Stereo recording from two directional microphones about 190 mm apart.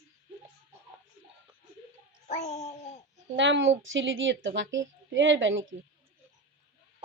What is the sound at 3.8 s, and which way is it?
Speech, 85° right.